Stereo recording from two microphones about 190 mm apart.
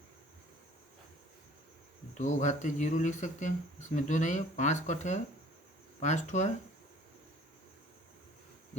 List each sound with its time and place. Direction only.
2.1 s speech: 40° left (ahead or behind)